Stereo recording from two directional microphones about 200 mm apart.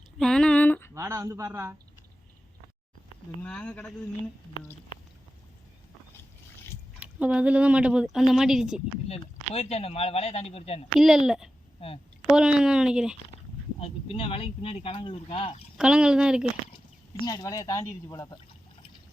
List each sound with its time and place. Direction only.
0.2 s a sound: 5° left (ahead or behind)
0.9 s a man's voice: 15° right (ahead or behind)
3.4 s speech: 5° left (ahead or behind)
7.0 s speech: 5° right (ahead or behind)
9.6 s speech: 30° left (ahead or behind)
10.9 s speech: centre (ahead or behind)
13.7 s speech: 30° left (ahead or behind)
15.8 s speech: 5° right (ahead or behind)
17.2 s speech: 20° left (ahead or behind)